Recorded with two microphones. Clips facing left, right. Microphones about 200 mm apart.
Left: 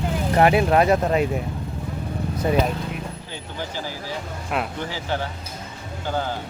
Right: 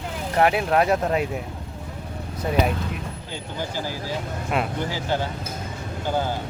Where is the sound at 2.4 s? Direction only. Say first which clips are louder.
Left 1 dB; 5° right (ahead or behind).